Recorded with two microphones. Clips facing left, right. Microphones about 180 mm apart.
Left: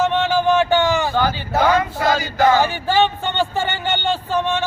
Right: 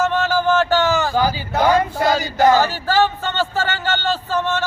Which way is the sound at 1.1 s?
10° right (ahead or behind).